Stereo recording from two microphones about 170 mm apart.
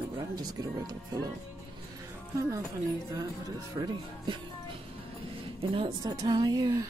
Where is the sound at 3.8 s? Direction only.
25° right (ahead or behind).